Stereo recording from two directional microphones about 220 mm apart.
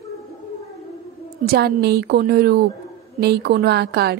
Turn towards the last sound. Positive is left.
turn(degrees=-45)  # may be behind; listen again after turning